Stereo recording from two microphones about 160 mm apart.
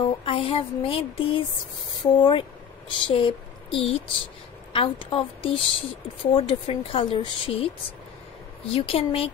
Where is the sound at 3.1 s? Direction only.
30° left (ahead or behind).